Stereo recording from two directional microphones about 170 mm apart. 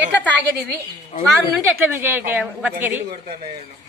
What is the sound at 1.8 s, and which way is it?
A woman's voice, 10° right (ahead or behind).